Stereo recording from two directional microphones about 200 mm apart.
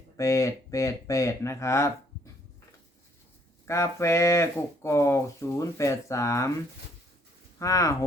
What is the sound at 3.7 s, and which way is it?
Speech, 15° left (ahead or behind).